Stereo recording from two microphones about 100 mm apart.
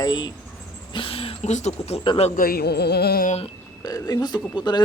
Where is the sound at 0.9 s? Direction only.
65° left (ahead or behind).